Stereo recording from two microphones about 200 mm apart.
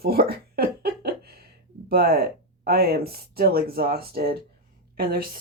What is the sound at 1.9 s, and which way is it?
Speech, 50° right (ahead or behind).